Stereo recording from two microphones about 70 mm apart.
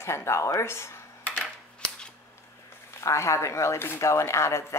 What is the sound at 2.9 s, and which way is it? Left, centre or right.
A woman's voice, left.